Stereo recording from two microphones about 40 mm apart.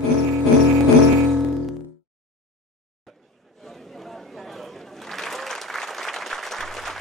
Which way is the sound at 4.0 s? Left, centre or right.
Centre.